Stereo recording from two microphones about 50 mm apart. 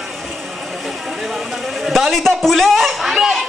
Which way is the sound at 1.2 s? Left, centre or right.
Centre.